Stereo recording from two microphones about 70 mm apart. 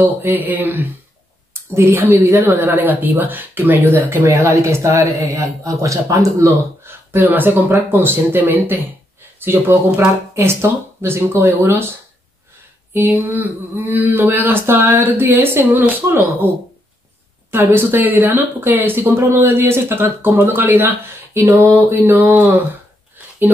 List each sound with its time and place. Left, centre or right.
0.0 s speech: right
1.5 s speech: right
4.4 s speech: right
6.8 s a sound: right
7.9 s speech: right
12.9 s speech: right